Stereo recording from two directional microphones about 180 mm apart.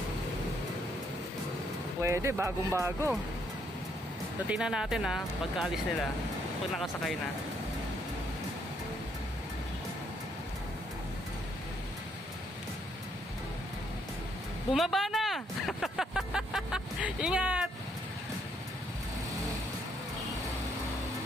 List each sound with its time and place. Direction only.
2.0 s speech: 15° right (ahead or behind)
4.5 s speech: 5° right (ahead or behind)
14.7 s vehicle: centre (ahead or behind)